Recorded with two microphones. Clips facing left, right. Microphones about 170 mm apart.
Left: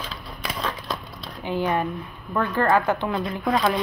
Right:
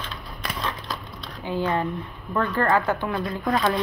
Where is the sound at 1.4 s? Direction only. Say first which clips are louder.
Left 1 dB; 15° left (ahead or behind).